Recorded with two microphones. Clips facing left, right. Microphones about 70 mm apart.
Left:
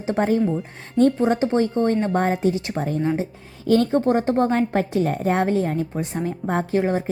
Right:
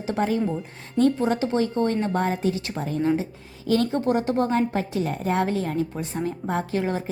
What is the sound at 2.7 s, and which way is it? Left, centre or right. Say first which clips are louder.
Speech: left 1 dB; left.